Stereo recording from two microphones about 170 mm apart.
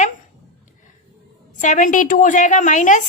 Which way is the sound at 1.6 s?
45° left (ahead or behind).